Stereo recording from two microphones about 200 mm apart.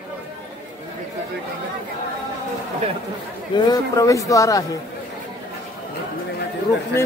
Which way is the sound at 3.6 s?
20° left (ahead or behind).